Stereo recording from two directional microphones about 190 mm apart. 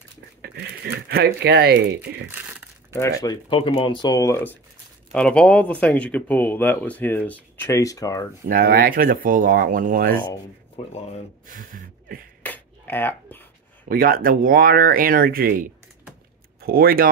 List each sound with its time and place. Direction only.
0.4 s a sound: 55° right (ahead or behind)
2.9 s speech: 15° left (ahead or behind)
8.5 s speech: 50° right (ahead or behind)
11.4 s speech: 45° right (ahead or behind)
12.4 s dishes: 10° left (ahead or behind)
13.8 s speech: 50° right (ahead or behind)